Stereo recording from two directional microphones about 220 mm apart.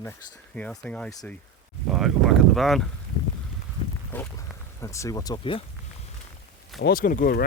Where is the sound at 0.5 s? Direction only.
5° left (ahead or behind).